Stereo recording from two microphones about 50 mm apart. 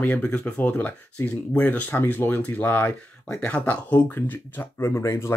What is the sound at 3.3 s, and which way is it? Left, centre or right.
Speech, left.